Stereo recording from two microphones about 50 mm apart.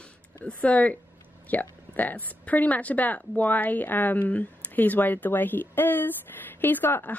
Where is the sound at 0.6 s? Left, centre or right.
Left.